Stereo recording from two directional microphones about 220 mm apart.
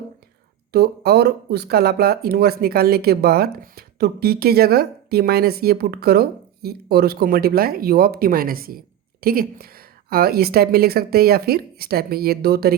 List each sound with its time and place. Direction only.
0.7 s speech: 45° right (ahead or behind)